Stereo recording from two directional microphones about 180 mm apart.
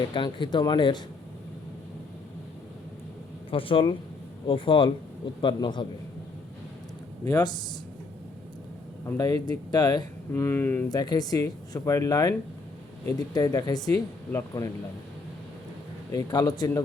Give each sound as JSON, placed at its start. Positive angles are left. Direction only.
{"t": 0.1, "sound": "speech", "side_deg": 25}
{"t": 3.5, "sound": "speech", "side_deg": 30}
{"t": 7.3, "sound": "speech", "side_deg": 20}
{"t": 9.0, "sound": "speech", "side_deg": 20}
{"t": 16.1, "sound": "speech", "side_deg": 20}